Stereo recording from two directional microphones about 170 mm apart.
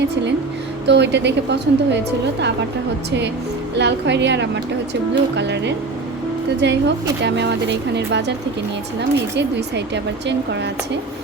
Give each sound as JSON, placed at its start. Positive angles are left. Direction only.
{"t": 0.9, "sound": "speech", "side_deg": -90}
{"t": 3.8, "sound": "speech", "side_deg": -90}